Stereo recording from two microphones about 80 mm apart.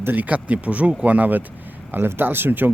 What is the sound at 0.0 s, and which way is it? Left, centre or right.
Speech, right.